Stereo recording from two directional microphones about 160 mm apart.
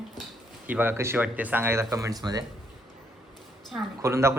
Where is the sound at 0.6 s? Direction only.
10° right (ahead or behind).